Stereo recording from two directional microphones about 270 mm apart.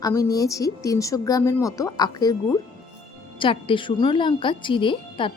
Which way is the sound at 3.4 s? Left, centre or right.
Centre.